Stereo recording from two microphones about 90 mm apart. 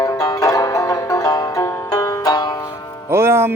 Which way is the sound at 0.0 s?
40° left (ahead or behind).